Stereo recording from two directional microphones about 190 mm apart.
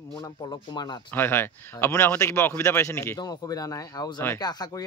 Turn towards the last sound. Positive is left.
turn(degrees=20)  # may be behind; listen again after turning